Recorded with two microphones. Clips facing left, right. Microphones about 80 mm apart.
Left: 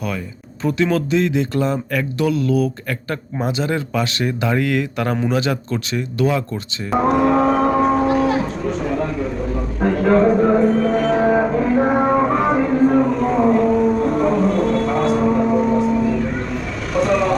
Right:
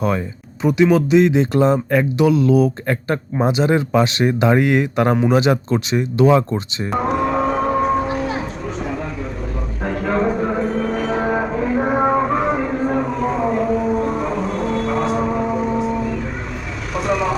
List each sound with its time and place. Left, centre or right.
0.6 s speech: centre
6.9 s a sound: centre
16.9 s vehicle: centre